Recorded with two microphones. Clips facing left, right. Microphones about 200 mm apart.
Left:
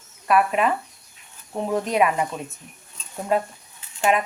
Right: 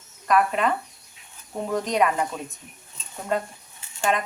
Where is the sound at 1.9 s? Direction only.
10° left (ahead or behind).